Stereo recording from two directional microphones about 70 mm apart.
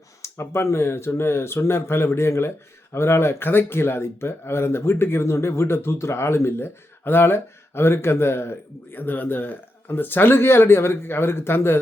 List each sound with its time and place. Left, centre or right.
0.2 s speech: left